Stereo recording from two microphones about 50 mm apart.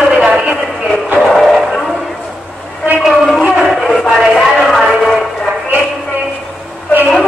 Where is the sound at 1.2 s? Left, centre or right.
Centre.